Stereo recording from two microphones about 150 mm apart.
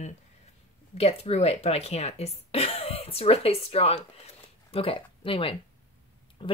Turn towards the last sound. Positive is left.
turn(degrees=35)  # may be behind; listen again after turning